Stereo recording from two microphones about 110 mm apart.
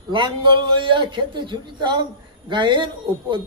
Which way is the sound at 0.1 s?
45° right (ahead or behind).